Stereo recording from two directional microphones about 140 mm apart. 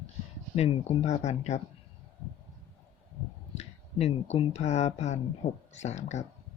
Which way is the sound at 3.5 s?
50° left (ahead or behind).